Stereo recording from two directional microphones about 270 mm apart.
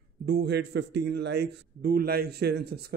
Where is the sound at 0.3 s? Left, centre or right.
Right.